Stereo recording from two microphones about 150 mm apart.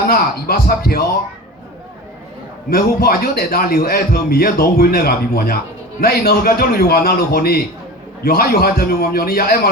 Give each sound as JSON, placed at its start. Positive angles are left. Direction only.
{"t": 0.1, "sound": "a man's voice", "side_deg": 85}
{"t": 2.6, "sound": "a man's voice", "side_deg": 85}